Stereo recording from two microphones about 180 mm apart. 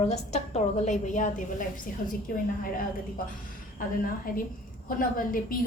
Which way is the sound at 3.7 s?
50° left (ahead or behind).